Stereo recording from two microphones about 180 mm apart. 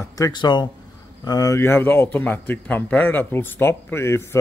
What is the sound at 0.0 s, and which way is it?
A man's voice, 20° left (ahead or behind).